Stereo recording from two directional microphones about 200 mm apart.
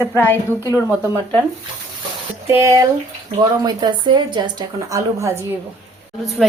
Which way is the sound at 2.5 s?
15° right (ahead or behind).